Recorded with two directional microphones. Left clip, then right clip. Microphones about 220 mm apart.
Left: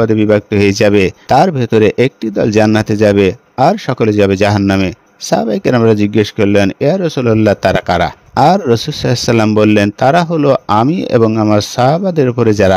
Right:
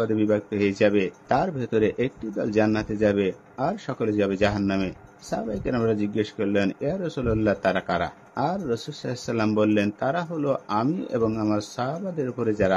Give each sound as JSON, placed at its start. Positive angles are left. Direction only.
{"t": 0.0, "sound": "speech", "side_deg": 45}